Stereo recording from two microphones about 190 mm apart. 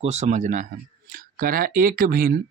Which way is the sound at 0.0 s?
35° right (ahead or behind).